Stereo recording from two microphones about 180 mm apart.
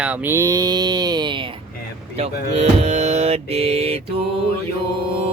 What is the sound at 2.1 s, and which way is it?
Speech, 35° right (ahead or behind).